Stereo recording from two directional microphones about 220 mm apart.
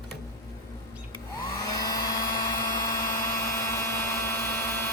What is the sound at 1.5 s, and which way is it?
Blender, 15° left (ahead or behind).